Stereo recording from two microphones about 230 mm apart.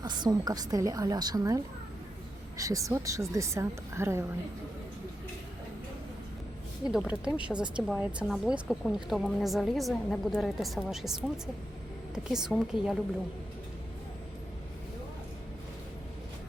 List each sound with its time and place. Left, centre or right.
0.0 s a woman's voice: centre
6.8 s speech: centre
12.1 s speech: centre